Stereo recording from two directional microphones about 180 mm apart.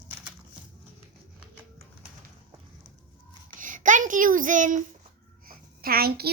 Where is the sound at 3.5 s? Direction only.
45° right (ahead or behind).